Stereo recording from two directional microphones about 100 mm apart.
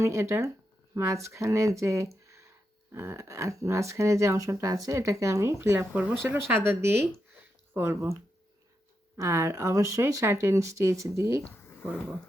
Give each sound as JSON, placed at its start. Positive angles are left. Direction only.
{"t": 0.0, "sound": "speech", "side_deg": -30}
{"t": 2.2, "sound": "a sound", "side_deg": -30}
{"t": 2.9, "sound": "speech", "side_deg": -25}
{"t": 5.9, "sound": "speech", "side_deg": -10}
{"t": 6.2, "sound": "speech", "side_deg": -25}